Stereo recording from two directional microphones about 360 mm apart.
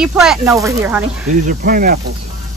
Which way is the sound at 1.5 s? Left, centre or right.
Right.